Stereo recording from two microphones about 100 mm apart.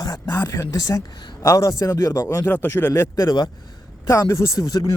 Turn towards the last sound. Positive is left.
turn(degrees=35)  # may be behind; listen again after turning